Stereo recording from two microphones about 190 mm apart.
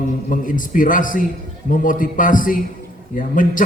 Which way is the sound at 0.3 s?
45° left (ahead or behind).